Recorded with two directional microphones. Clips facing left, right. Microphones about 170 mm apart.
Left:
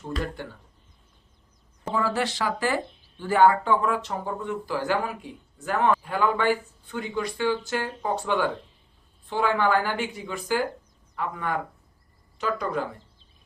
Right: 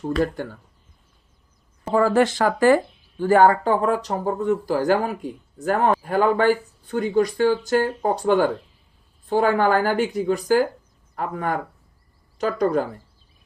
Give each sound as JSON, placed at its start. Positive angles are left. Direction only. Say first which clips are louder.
{"t": 0.4, "sound": "speech", "louder": "right 7 dB", "side_deg": -45}
{"t": 1.9, "sound": "speech", "louder": "right 8 dB", "side_deg": -50}